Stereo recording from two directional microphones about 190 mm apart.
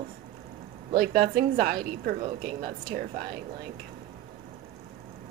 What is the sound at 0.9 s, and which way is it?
A woman's voice, 50° right (ahead or behind).